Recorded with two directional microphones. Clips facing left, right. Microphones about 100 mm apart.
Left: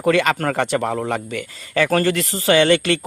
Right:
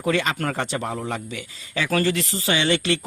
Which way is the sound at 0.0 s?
60° left (ahead or behind).